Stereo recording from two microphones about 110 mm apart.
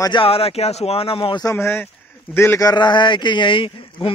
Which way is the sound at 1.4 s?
25° left (ahead or behind).